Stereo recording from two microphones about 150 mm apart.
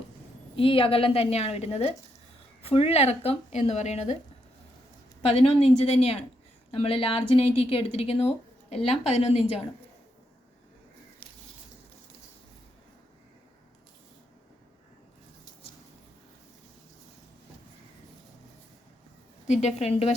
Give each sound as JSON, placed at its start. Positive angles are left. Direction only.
{"t": 0.5, "sound": "a woman's voice", "side_deg": 35}
{"t": 5.3, "sound": "a woman's voice", "side_deg": 40}
{"t": 19.5, "sound": "speech", "side_deg": 45}